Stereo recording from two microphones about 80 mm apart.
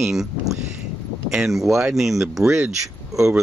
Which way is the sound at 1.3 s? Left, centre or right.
Centre.